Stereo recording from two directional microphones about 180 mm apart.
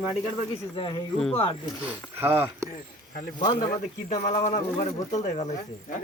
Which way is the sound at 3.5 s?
45° left (ahead or behind).